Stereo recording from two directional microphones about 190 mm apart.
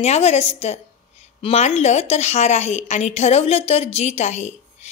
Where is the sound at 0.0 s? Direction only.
35° left (ahead or behind).